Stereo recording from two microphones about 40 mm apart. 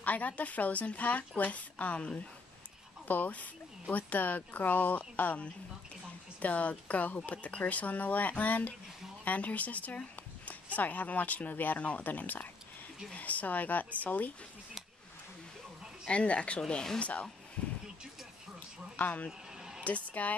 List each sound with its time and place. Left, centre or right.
0.0 s a woman's voice: left
6.4 s a woman's voice: left
16.1 s speech: left
16.6 s speech: centre
17.0 s a woman's voice: left
18.9 s speech: left
19.8 s a sound: left